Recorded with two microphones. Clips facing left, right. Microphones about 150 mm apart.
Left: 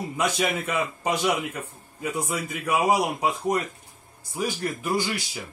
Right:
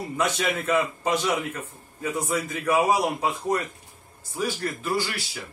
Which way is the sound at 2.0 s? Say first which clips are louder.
Right 2 dB; 15° left (ahead or behind).